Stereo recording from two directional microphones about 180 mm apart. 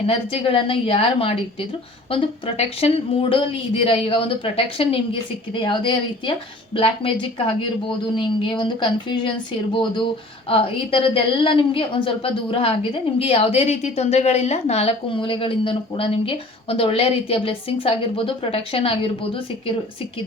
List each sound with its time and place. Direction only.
0.1 s a woman's voice: 30° left (ahead or behind)